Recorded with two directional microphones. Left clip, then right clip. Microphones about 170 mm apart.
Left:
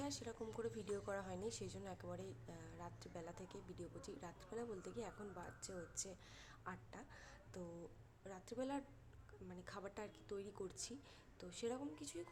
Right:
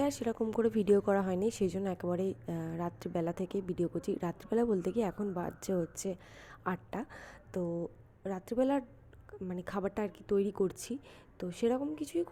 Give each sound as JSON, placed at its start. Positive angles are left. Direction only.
{"t": 0.0, "sound": "a woman's voice", "side_deg": -45}